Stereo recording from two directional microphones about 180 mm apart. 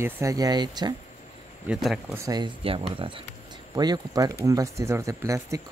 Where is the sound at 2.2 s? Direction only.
25° right (ahead or behind).